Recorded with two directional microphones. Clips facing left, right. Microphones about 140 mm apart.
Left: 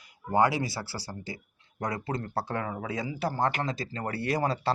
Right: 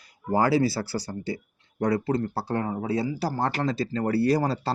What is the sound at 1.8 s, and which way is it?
Speech, 35° right (ahead or behind).